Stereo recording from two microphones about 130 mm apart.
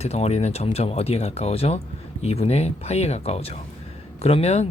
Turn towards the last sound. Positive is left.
turn(degrees=55)  # may be behind; listen again after turning